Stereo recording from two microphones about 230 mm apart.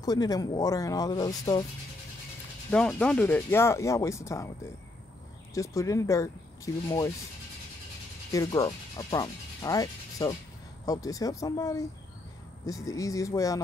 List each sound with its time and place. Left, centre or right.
0.0 s speech: centre
2.7 s speech: centre
5.5 s speech: centre
8.3 s speech: centre